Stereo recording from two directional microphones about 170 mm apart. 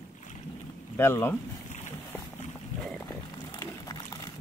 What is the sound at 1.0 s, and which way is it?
Speech, 15° left (ahead or behind).